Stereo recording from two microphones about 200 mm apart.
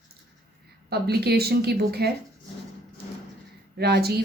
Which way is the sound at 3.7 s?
55° right (ahead or behind).